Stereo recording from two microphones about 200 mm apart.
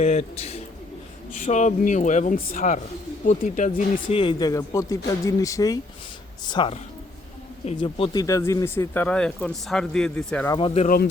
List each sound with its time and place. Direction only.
0.0 s speech: 30° left (ahead or behind)
4.1 s speech: 25° left (ahead or behind); by 10.6 s 10° left (ahead or behind)
10.8 s speech: 50° left (ahead or behind)